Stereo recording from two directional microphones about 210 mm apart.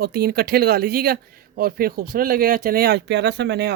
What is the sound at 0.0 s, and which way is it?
Speech, 50° right (ahead or behind).